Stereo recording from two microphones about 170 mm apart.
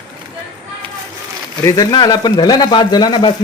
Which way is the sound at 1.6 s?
20° left (ahead or behind).